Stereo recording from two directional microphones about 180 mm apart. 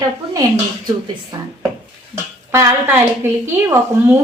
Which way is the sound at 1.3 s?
20° right (ahead or behind).